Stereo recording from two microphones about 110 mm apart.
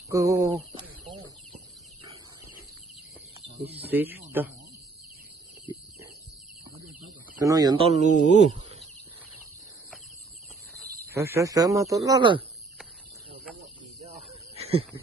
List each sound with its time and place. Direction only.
0.1 s speech: 30° right (ahead or behind)
3.8 s speech: 15° right (ahead or behind)
7.3 s speech: 30° right (ahead or behind)
7.8 s speech: 80° right
11.1 s speech: 25° right (ahead or behind)
14.3 s a sound: 65° right (ahead or behind)